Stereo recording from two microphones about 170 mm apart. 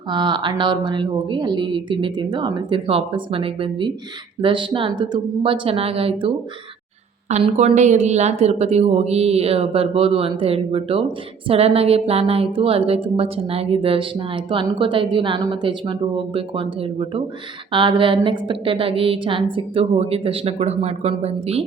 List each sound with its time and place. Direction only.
0.1 s a woman's voice: 25° right (ahead or behind)